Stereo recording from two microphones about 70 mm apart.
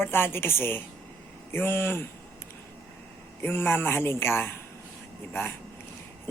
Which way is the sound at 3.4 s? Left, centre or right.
Left.